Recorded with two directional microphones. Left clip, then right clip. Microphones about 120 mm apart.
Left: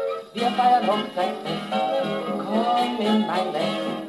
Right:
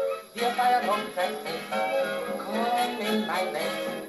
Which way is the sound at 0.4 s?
30° left (ahead or behind).